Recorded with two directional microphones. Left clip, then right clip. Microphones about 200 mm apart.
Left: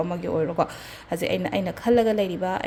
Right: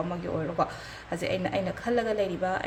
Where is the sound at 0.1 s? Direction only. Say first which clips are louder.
Left 6 dB; 40° left (ahead or behind).